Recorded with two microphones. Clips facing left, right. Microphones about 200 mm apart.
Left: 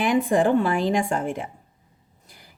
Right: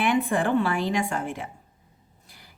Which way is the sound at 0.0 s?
40° left (ahead or behind).